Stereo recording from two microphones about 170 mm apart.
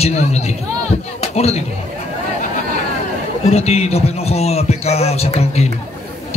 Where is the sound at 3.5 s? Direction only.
40° left (ahead or behind).